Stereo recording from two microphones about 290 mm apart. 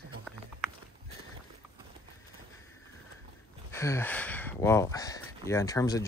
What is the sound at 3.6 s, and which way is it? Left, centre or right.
Speech, centre.